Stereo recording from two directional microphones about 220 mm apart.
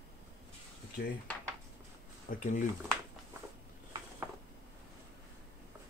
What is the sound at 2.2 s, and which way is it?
Speech, 35° left (ahead or behind).